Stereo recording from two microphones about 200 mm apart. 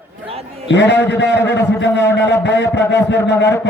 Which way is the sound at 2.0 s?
10° left (ahead or behind).